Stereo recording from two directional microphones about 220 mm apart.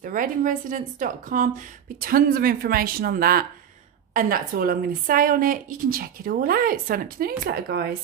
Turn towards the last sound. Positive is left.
turn(degrees=-45)  # may be behind; listen again after turning